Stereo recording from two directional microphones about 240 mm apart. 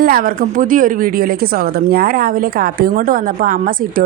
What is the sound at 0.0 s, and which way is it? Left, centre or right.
Speech, right.